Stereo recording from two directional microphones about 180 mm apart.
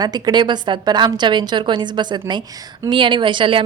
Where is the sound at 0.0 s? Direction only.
25° right (ahead or behind).